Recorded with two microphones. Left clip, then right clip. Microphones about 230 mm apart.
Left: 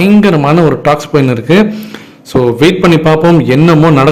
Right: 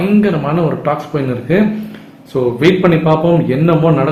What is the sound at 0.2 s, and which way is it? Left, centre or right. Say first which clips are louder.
A man's voice: left 7 dB; left.